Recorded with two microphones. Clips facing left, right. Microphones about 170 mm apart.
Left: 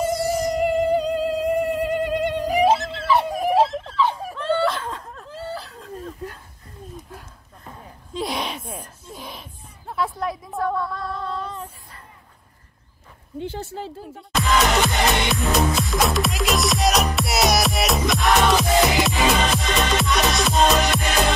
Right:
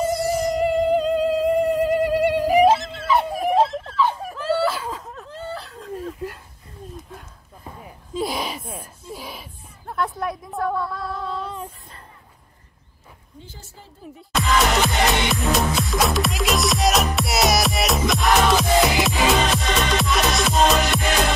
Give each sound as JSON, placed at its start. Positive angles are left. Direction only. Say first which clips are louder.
{"t": 0.0, "sound": "music", "louder": "right 1 dB", "side_deg": 0}
{"t": 3.1, "sound": "whimper", "louder": "even", "side_deg": 0}
{"t": 7.8, "sound": "a sound", "louder": "right 2 dB", "side_deg": -5}
{"t": 13.4, "sound": "a woman's voice", "louder": "left 15 dB", "side_deg": 65}
{"t": 14.3, "sound": "music", "louder": "even", "side_deg": 0}